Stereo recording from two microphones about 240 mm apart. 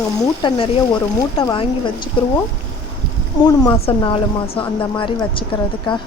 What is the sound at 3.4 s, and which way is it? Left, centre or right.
A woman's voice, centre.